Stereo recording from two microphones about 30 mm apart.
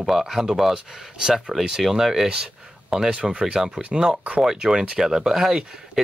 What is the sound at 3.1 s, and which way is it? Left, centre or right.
Speech, right.